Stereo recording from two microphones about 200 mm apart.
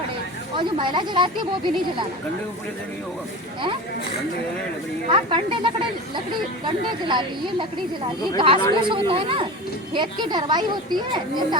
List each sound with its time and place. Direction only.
0.5 s speech: 25° right (ahead or behind)
5.0 s speech: 25° right (ahead or behind)